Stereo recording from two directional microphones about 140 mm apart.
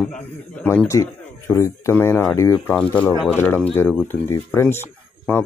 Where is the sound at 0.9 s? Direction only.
20° left (ahead or behind).